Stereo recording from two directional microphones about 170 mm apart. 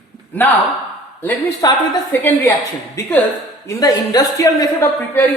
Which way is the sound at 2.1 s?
10° left (ahead or behind).